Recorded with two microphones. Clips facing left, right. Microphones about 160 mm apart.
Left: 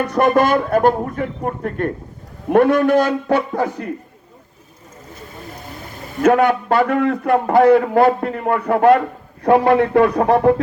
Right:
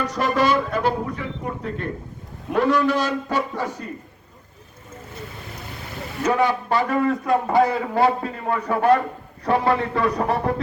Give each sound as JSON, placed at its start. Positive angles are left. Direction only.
{"t": 0.0, "sound": "a man's voice", "side_deg": 55}
{"t": 6.2, "sound": "a man's voice", "side_deg": 60}